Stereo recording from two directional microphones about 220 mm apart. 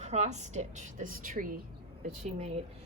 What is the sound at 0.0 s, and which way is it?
A woman's voice, 30° right (ahead or behind).